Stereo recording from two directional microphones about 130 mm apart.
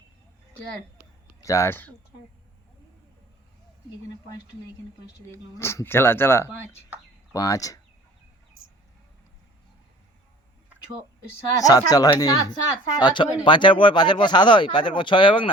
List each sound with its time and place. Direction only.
1.4 s speech: 25° left (ahead or behind)
5.3 s speech: 20° left (ahead or behind)
11.5 s speech: 30° left (ahead or behind)